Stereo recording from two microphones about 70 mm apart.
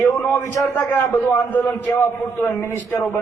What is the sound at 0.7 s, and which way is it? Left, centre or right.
A man's voice, left.